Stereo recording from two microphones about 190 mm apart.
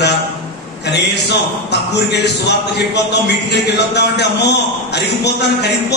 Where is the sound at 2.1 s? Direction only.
65° left (ahead or behind).